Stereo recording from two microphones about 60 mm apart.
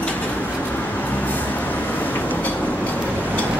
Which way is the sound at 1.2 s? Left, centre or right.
Left.